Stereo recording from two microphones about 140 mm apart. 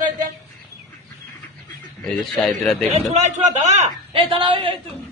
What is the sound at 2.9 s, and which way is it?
Speech, 55° right (ahead or behind).